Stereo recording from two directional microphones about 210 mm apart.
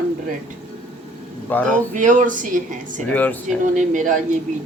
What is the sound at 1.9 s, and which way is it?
A woman's voice, 35° right (ahead or behind).